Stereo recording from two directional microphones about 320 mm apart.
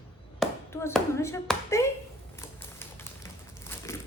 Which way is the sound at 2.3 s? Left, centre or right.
Centre.